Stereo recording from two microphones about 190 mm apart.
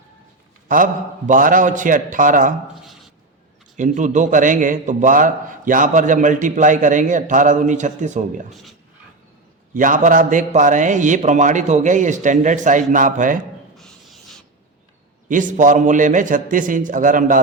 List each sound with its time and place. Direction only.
1.3 s a man's voice: 45° right (ahead or behind)
2.8 s a sound: centre (ahead or behind)
3.8 s a man's voice: 40° right (ahead or behind)
9.7 s a man's voice: 45° right (ahead or behind)
13.7 s a sound: centre (ahead or behind)
15.3 s a man's voice: 45° right (ahead or behind)